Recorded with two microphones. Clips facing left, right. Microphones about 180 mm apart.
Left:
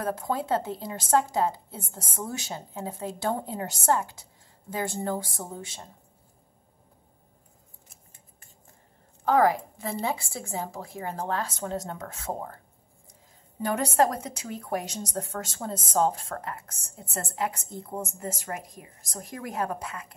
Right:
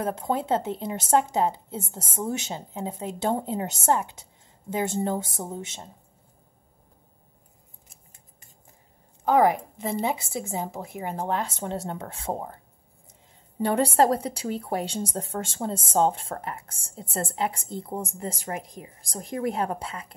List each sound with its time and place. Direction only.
0.0 s a woman's voice: 25° right (ahead or behind)
9.2 s a woman's voice: 15° right (ahead or behind)
13.6 s a woman's voice: 30° right (ahead or behind)